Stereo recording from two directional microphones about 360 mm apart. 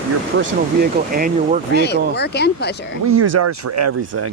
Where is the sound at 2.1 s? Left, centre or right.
Left.